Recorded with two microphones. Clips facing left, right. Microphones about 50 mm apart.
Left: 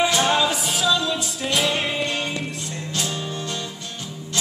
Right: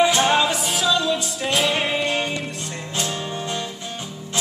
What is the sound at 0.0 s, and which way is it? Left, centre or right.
Music, centre.